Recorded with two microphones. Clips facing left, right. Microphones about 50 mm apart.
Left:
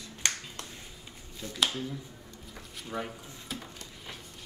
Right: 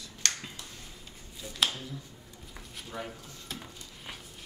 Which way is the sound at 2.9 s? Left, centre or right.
Left.